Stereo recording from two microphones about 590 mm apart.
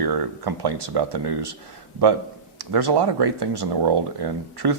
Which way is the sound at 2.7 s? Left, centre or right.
Right.